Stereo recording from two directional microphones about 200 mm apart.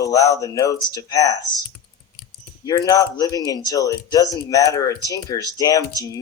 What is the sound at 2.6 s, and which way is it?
Speech, 20° left (ahead or behind).